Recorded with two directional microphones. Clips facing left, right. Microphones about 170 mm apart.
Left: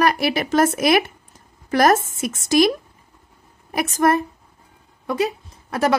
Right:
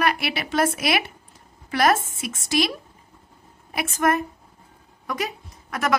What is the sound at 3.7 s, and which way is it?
A woman's voice, 40° left (ahead or behind).